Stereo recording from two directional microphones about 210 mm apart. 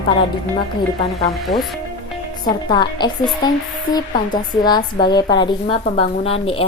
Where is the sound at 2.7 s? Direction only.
20° left (ahead or behind).